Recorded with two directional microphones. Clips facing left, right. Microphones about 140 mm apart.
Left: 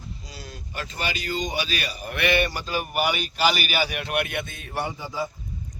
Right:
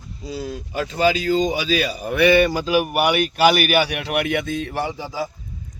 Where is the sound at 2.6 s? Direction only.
80° right.